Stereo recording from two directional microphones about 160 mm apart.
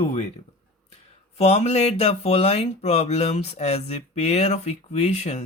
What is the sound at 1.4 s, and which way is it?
Speech, 40° left (ahead or behind).